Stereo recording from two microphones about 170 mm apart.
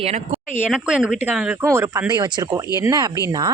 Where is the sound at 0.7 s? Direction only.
5° right (ahead or behind).